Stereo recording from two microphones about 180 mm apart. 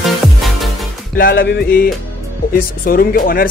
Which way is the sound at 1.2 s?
55° left (ahead or behind).